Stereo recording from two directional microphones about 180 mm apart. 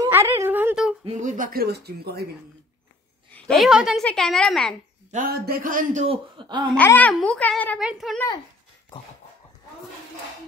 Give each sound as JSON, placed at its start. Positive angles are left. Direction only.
{"t": 0.0, "sound": "a sound", "side_deg": -15}
{"t": 1.0, "sound": "speech", "side_deg": -40}
{"t": 3.3, "sound": "a woman's voice", "side_deg": 5}
{"t": 5.1, "sound": "a man's voice", "side_deg": -55}
{"t": 6.0, "sound": "speech", "side_deg": -25}
{"t": 6.7, "sound": "a child's voice", "side_deg": 10}
{"t": 7.8, "sound": "a woman's voice", "side_deg": -5}